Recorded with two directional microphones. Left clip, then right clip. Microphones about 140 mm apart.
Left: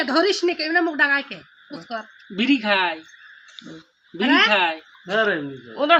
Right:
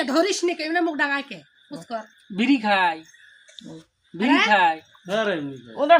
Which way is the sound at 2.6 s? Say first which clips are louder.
Right 3 dB; 40° right (ahead or behind).